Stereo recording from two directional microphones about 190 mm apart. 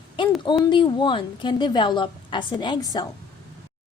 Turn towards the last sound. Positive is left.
turn(degrees=20)  # may be behind; listen again after turning